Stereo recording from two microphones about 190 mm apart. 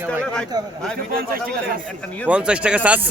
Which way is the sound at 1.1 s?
50° right (ahead or behind).